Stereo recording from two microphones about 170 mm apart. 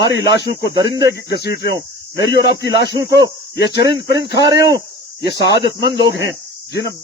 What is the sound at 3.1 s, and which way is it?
Speech, 20° right (ahead or behind).